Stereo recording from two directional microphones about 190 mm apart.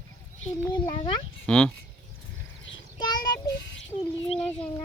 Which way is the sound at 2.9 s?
20° left (ahead or behind).